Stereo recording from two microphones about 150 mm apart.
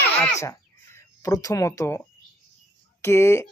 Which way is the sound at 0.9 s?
20° left (ahead or behind).